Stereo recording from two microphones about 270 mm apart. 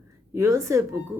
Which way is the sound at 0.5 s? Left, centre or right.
Centre.